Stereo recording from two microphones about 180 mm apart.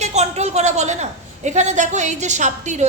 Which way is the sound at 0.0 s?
40° right (ahead or behind).